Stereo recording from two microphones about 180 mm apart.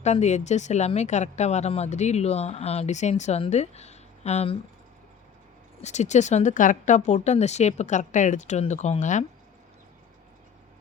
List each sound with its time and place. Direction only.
0.0 s speech: 40° left (ahead or behind)
5.8 s speech: 40° left (ahead or behind)